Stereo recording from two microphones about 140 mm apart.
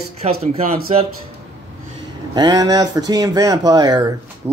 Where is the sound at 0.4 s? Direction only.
45° right (ahead or behind).